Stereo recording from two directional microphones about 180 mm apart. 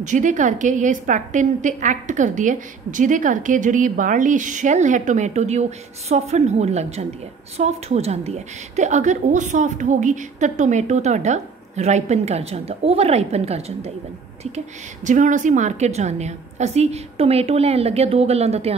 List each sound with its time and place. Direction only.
0.0 s a woman's voice: 45° right (ahead or behind)
15.0 s a woman's voice: 45° right (ahead or behind)